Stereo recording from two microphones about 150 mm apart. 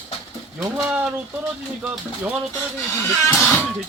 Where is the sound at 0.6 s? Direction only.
5° right (ahead or behind).